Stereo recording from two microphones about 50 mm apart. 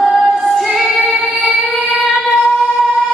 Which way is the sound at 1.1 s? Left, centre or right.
Right.